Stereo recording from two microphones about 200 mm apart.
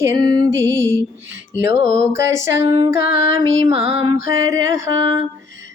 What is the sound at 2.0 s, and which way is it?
Music, 15° right (ahead or behind).